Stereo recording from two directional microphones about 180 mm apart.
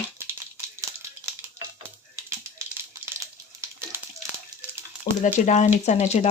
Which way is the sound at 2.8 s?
15° right (ahead or behind).